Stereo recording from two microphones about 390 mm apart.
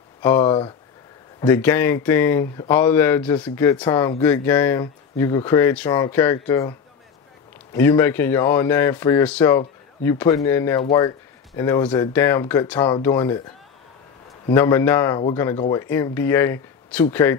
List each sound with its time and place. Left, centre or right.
0.2 s speech: centre
7.7 s speech: centre
14.5 s speech: centre